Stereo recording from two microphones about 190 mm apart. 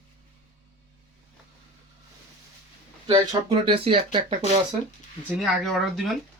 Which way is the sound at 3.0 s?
25° right (ahead or behind).